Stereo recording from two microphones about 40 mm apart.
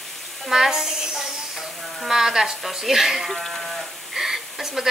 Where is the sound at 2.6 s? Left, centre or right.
Centre.